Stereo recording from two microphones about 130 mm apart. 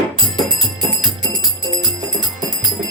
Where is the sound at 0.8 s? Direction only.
35° right (ahead or behind).